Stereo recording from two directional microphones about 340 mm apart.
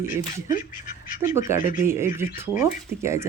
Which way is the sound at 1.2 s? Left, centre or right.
Centre.